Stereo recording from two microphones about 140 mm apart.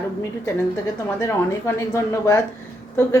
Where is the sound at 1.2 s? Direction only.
20° left (ahead or behind).